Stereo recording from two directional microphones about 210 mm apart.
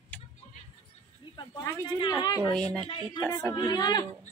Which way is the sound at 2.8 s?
25° left (ahead or behind).